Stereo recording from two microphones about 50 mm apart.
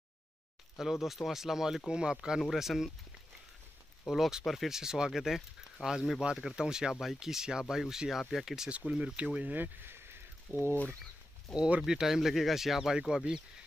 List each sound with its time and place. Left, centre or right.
0.7 s speech: centre
4.1 s speech: centre
8.6 s speech: right
9.8 s a sound: right
10.5 s speech: right
11.5 s speech: centre
11.8 s speech: centre